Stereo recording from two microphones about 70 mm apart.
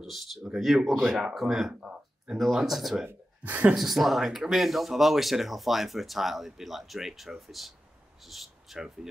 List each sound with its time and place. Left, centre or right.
0.0 s speech: centre
1.7 s a sound: centre
2.4 s speech: centre
3.1 s speech: right
3.7 s speech: centre